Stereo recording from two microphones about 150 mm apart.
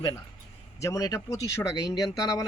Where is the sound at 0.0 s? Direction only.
25° left (ahead or behind).